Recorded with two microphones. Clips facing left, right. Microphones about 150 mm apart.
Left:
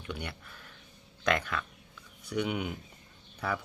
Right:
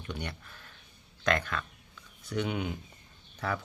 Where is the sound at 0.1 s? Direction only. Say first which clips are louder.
Even; 10° left (ahead or behind).